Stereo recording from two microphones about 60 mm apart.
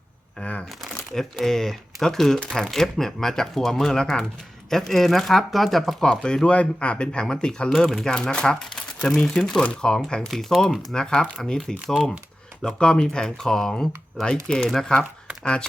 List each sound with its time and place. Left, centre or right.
0.3 s a sound: left
0.8 s speech: centre
6.1 s speech: centre
7.8 s speech: centre
8.1 s speech: centre